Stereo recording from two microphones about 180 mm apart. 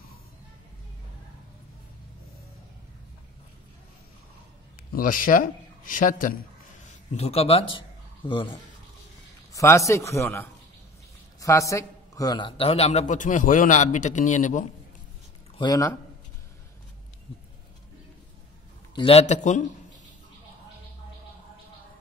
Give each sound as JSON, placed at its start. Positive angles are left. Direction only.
{"t": 4.9, "sound": "a man's voice", "side_deg": 50}
{"t": 6.9, "sound": "speech", "side_deg": 35}
{"t": 9.5, "sound": "a man's voice", "side_deg": 15}
{"t": 15.5, "sound": "speech", "side_deg": 20}
{"t": 18.9, "sound": "a man's voice", "side_deg": 35}